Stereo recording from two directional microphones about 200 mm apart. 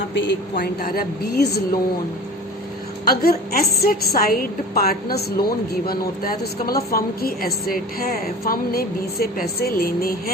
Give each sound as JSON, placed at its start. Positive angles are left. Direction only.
{"t": 0.1, "sound": "a woman's voice", "side_deg": 60}
{"t": 0.5, "sound": "a woman's voice", "side_deg": 50}
{"t": 3.1, "sound": "a woman's voice", "side_deg": 50}